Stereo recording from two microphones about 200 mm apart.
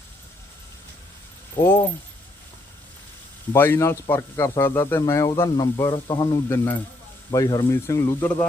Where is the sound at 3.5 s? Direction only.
10° left (ahead or behind).